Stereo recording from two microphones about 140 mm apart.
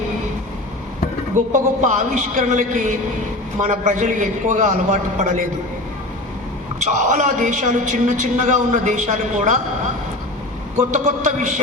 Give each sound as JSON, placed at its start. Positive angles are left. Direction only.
{"t": 1.5, "sound": "a man's voice", "side_deg": -60}
{"t": 6.7, "sound": "a man's voice", "side_deg": -60}
{"t": 10.9, "sound": "a man's voice", "side_deg": -55}